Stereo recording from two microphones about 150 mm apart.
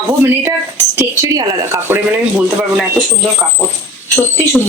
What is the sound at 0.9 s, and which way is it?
A woman's voice, 20° right (ahead or behind).